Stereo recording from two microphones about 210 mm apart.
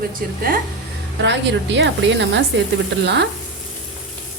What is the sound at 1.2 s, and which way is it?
A woman's voice, 55° right (ahead or behind).